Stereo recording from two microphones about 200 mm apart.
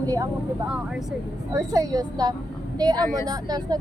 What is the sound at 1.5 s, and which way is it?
Speech, 20° right (ahead or behind).